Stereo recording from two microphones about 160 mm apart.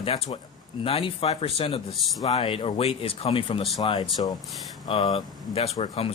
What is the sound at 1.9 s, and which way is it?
Speech, centre (ahead or behind).